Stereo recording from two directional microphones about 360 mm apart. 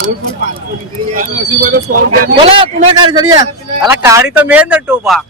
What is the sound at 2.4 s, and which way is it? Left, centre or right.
A man's voice, centre.